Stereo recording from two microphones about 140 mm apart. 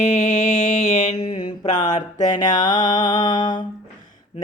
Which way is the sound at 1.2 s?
35° left (ahead or behind).